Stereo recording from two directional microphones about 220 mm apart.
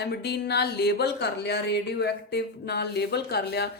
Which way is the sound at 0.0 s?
50° left (ahead or behind).